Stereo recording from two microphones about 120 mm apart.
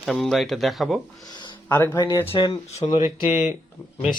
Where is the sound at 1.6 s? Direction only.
20° left (ahead or behind).